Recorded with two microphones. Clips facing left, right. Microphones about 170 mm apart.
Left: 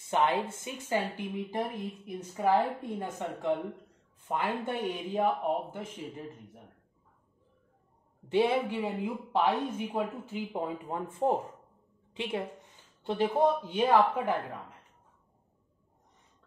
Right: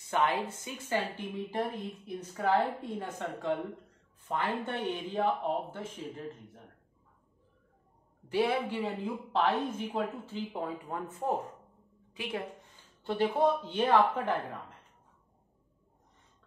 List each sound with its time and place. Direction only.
0.1 s speech: 25° left (ahead or behind); by 2.7 s 10° left (ahead or behind)
3.0 s speech: 20° left (ahead or behind)
8.3 s speech: 25° left (ahead or behind)
8.8 s a woman's voice: 10° left (ahead or behind)
13.2 s speech: 10° left (ahead or behind)